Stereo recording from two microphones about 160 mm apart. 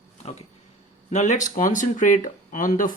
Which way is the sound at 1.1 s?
50° left (ahead or behind).